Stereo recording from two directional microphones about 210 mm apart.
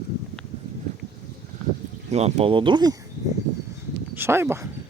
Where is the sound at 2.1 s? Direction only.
30° right (ahead or behind).